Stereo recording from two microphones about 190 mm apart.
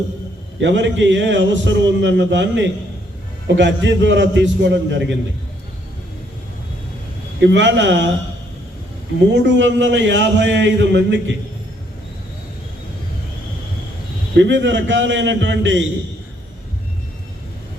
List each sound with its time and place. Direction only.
0.6 s a man's voice: 70° right (ahead or behind)
7.4 s a man's voice: 70° right (ahead or behind)
9.3 s a man's voice: 70° right (ahead or behind)
14.3 s a man's voice: 70° right (ahead or behind)